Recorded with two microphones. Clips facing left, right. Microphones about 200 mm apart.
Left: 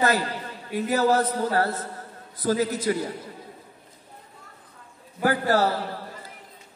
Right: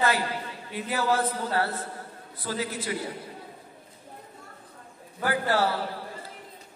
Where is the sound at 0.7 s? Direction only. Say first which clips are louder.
Left 6 dB; 40° left (ahead or behind).